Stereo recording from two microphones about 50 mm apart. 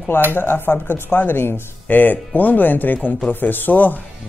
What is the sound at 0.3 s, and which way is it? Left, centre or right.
Speech, left.